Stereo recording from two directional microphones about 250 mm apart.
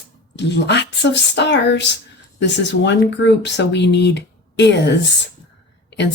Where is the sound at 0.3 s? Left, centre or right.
Left.